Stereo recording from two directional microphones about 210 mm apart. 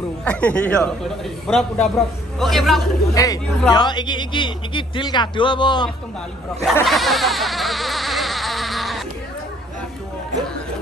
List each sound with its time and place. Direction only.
0.2 s a man's voice: 5° left (ahead or behind)
3.2 s a man's voice: 15° left (ahead or behind)
6.6 s insect: centre (ahead or behind)